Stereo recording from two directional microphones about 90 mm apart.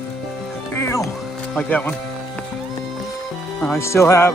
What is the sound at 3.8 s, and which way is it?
Speech, 30° left (ahead or behind).